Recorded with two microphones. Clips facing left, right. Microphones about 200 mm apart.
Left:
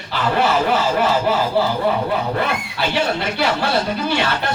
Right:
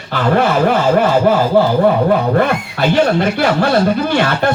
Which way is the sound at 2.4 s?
50° right (ahead or behind).